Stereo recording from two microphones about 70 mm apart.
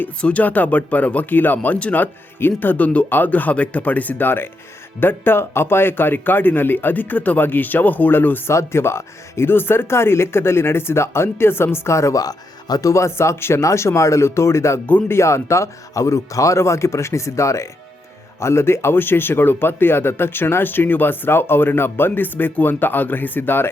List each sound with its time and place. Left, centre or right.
0.2 s speech: centre
8.4 s speech: left
12.9 s speech: left